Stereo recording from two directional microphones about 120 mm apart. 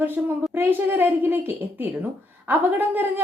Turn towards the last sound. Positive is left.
turn(degrees=-15)  # may be behind; listen again after turning